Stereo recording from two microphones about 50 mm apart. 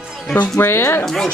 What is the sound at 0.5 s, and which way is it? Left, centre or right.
Speech, left.